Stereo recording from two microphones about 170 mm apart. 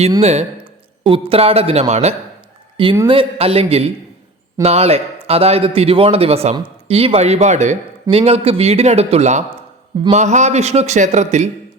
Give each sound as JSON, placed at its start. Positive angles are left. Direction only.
{"t": 0.2, "sound": "a man's voice", "side_deg": -40}